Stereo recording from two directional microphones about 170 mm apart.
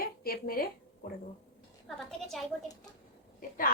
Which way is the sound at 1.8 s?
Centre (ahead or behind).